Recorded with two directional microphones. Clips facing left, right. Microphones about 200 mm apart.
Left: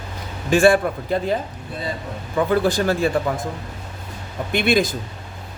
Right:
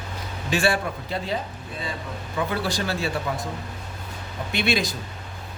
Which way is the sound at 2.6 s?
50° left (ahead or behind).